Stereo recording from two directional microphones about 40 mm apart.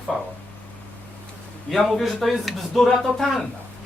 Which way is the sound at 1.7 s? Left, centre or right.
Centre.